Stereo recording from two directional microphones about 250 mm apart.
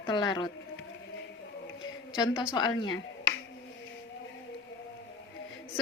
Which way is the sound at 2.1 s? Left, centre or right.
Centre.